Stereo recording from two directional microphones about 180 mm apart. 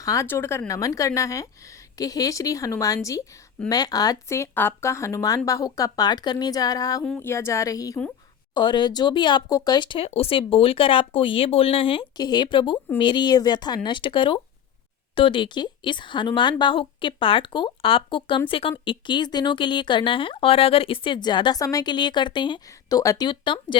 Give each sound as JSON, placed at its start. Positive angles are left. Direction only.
{"t": 0.0, "sound": "a woman's voice", "side_deg": 15}
{"t": 7.0, "sound": "a woman's voice", "side_deg": 10}